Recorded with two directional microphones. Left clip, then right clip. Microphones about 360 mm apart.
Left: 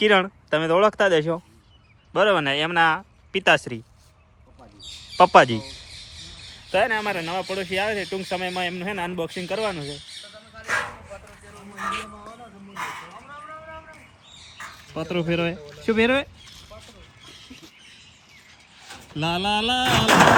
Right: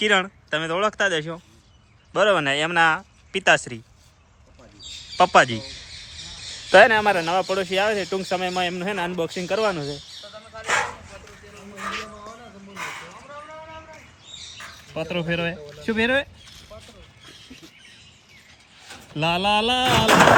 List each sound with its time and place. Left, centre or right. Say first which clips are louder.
0.0 s speech: left 2 dB; centre
5.1 s speech: left 2 dB; centre
6.7 s speech: right 8 dB; right
10.5 s bow-wow: right 3 dB; centre
12.7 s dog: left 1 dB; centre
14.6 s a sound: right 1 dB; centre
18.8 s speech: right 3 dB; centre